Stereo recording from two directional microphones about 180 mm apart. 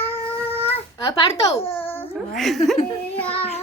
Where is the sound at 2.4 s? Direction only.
Centre (ahead or behind).